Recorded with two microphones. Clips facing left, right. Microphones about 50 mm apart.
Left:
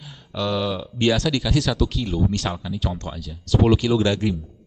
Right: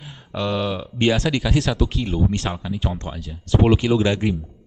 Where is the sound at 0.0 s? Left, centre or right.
Centre.